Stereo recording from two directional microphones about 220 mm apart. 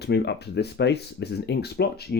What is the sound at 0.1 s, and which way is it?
Speech, 50° left (ahead or behind).